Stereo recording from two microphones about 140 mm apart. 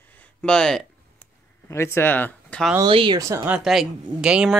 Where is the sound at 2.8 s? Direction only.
35° right (ahead or behind).